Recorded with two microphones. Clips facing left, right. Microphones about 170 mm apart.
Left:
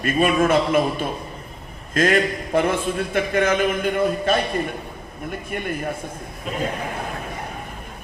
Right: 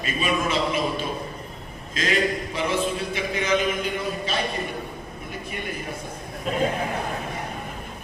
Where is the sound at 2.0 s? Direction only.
55° left (ahead or behind).